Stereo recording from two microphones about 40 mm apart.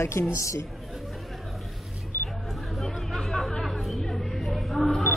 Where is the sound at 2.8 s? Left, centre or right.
Centre.